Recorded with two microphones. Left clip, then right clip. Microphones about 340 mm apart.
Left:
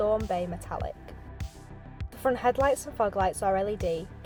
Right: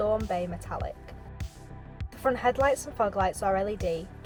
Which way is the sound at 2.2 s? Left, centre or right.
Centre.